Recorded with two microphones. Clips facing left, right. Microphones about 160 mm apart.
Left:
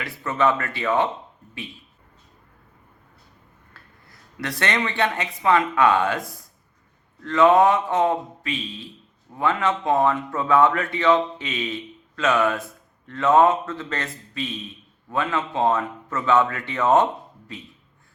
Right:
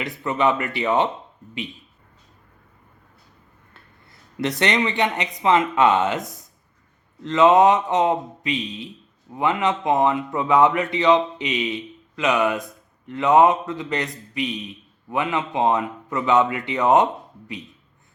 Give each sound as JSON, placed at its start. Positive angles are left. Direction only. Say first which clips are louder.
{"t": 0.0, "sound": "speech", "louder": "right 1 dB", "side_deg": -20}
{"t": 4.4, "sound": "a man's voice", "louder": "right 4 dB", "side_deg": -20}